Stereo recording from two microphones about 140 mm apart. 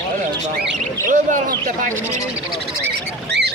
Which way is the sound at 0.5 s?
70° right (ahead or behind).